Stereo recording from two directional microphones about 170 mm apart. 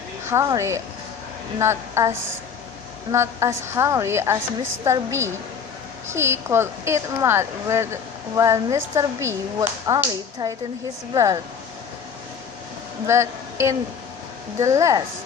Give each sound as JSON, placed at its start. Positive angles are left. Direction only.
{"t": 0.3, "sound": "speech", "side_deg": -20}
{"t": 13.1, "sound": "speech", "side_deg": -15}